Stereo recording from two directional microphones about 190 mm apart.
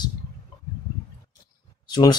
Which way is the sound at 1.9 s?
20° left (ahead or behind).